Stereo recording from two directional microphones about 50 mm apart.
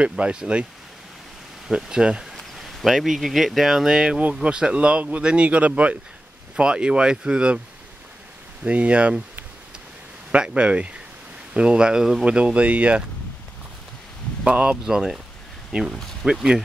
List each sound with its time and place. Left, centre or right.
0.2 s speech: centre
1.8 s speech: centre
2.3 s speech: centre; by 5.9 s right
6.5 s speech: centre
8.6 s speech: right
10.3 s speech: right
14.4 s speech: right
14.9 s speech: centre